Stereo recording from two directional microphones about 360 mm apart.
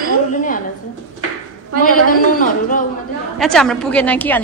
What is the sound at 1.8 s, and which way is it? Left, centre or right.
A man's voice, left.